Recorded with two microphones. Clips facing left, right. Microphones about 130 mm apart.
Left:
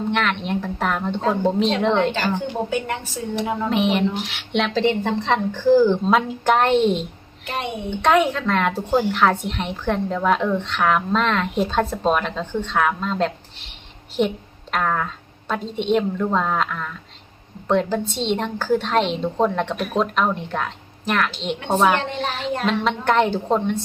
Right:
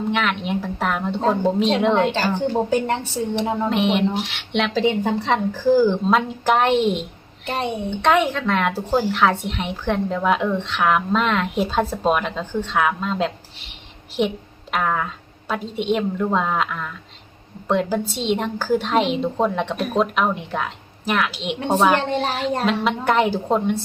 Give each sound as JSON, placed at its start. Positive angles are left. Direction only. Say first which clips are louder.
{"t": 0.1, "sound": "speech", "louder": "even", "side_deg": 0}
{"t": 2.4, "sound": "speech", "louder": "right 4 dB", "side_deg": -30}
{"t": 3.7, "sound": "speech", "louder": "left 1 dB", "side_deg": 0}
{"t": 7.4, "sound": "a child's voice", "louder": "right 3 dB", "side_deg": -35}
{"t": 7.9, "sound": "speech", "louder": "left 1 dB", "side_deg": 0}